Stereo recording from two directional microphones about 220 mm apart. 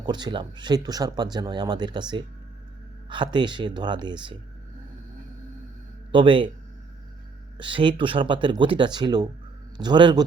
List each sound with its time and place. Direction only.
0.0 s speech: 20° right (ahead or behind)
6.1 s speech: 20° right (ahead or behind)
7.6 s speech: 20° right (ahead or behind)